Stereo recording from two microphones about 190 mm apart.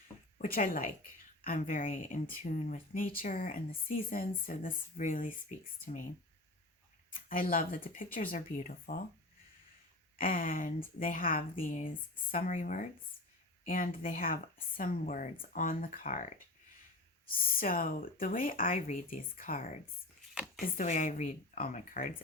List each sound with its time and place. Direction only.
0.4 s speech: 50° left (ahead or behind)
7.1 s speech: 45° left (ahead or behind)
10.2 s speech: 45° left (ahead or behind)
17.2 s speech: 50° left (ahead or behind)
20.7 s speech: 45° left (ahead or behind)